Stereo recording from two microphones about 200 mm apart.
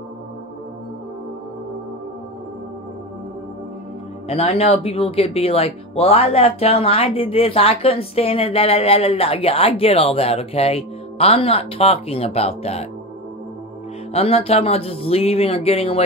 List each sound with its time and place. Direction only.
4.3 s speech: 30° left (ahead or behind)
14.1 s speech: 30° left (ahead or behind)